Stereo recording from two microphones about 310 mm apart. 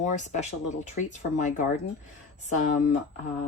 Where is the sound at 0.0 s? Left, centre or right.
Left.